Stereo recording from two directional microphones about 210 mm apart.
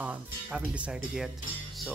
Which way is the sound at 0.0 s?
5° right (ahead or behind).